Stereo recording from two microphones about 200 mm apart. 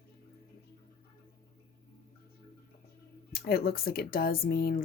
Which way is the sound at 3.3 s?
50° left (ahead or behind).